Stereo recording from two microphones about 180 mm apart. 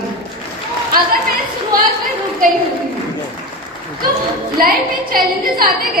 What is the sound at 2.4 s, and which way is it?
Speech, 50° right (ahead or behind).